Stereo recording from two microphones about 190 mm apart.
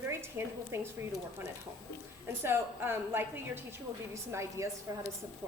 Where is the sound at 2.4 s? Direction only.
10° right (ahead or behind).